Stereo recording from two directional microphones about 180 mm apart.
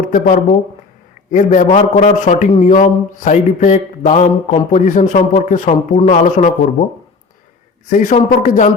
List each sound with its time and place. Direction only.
0.1 s speech: 45° left (ahead or behind)
7.9 s speech: 45° left (ahead or behind)